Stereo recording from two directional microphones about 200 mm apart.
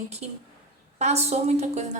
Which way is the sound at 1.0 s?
30° right (ahead or behind).